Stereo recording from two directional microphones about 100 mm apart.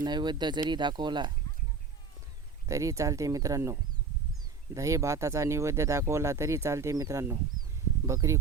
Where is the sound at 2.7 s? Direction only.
30° right (ahead or behind).